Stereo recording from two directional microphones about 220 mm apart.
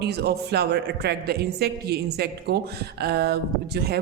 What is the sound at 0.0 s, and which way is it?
A man's voice, 50° right (ahead or behind).